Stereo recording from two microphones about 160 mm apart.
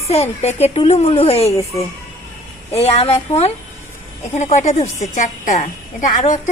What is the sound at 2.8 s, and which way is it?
A woman's voice, 40° left (ahead or behind).